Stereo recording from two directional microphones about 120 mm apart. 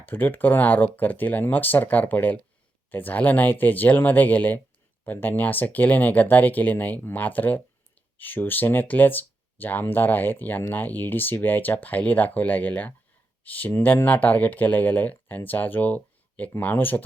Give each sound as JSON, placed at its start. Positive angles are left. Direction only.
{"t": 0.0, "sound": "speech", "side_deg": 15}